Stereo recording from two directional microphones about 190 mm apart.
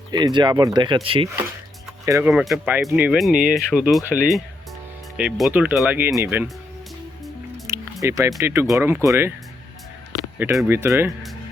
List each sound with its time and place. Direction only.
0.1 s speech: 25° right (ahead or behind)
2.0 s speech: 15° right (ahead or behind)
2.3 s speech: centre (ahead or behind)
7.7 s music: 15° right (ahead or behind)
8.0 s speech: 15° right (ahead or behind)
10.3 s speech: 10° right (ahead or behind)